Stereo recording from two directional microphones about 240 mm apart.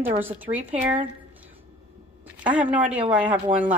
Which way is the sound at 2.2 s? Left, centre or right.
Centre.